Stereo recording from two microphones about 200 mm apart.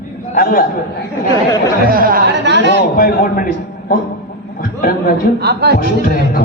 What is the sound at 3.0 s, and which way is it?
A man's voice, 45° left (ahead or behind).